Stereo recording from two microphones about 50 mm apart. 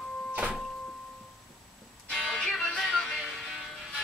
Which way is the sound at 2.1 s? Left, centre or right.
Centre.